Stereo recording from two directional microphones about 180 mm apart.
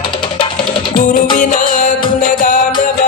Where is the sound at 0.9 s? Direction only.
50° left (ahead or behind).